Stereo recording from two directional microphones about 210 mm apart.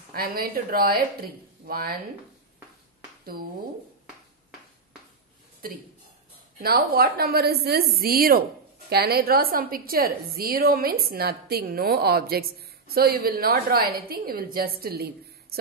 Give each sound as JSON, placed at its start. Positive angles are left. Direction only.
{"t": 0.1, "sound": "a woman's voice", "side_deg": -45}
{"t": 6.6, "sound": "a woman's voice", "side_deg": -45}